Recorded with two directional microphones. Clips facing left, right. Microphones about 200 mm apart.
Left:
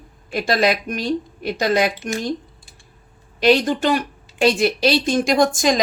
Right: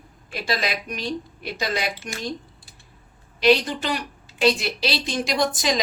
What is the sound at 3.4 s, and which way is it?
A woman's voice, 50° left (ahead or behind).